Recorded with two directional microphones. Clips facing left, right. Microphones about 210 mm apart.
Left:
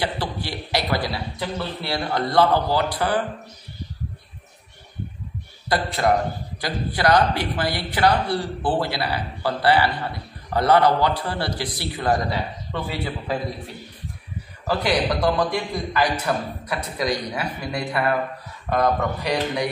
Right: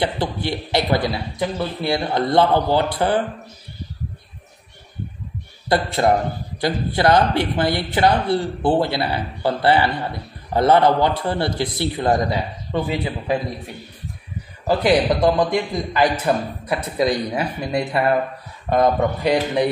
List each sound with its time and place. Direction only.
0.0 s a man's voice: 20° right (ahead or behind)
5.7 s a man's voice: 25° right (ahead or behind)
14.7 s a man's voice: 25° right (ahead or behind)